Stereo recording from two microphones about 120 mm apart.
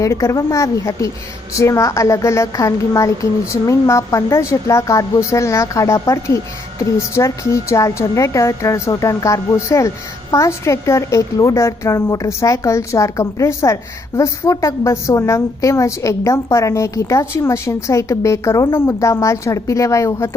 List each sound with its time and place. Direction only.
0.0 s a woman's voice: 25° left (ahead or behind)